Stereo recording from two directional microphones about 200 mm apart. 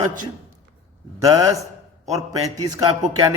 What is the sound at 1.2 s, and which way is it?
A man's voice, 15° right (ahead or behind).